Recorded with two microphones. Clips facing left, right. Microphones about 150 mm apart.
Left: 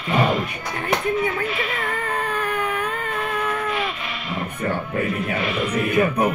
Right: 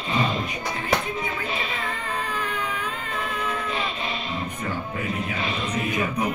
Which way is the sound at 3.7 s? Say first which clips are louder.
Left 2 dB; 25° right (ahead or behind).